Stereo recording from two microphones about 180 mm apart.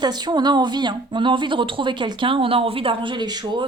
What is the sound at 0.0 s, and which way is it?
A woman's voice, 25° right (ahead or behind).